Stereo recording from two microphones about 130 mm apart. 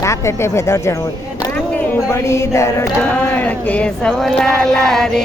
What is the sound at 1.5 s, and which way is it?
Speech, 10° left (ahead or behind).